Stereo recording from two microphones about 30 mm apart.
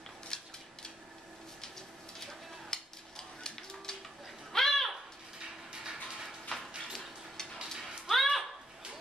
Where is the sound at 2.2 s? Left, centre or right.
Centre.